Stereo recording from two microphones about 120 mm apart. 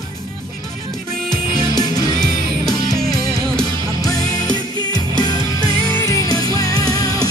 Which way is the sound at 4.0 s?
30° left (ahead or behind).